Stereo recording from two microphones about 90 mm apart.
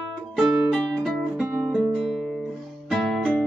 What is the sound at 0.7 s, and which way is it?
Music, 5° left (ahead or behind).